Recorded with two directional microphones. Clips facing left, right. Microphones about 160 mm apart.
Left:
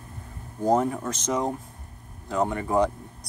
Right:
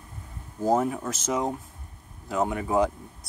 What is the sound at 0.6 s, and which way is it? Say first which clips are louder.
Speech: left 1 dB; 5° right (ahead or behind).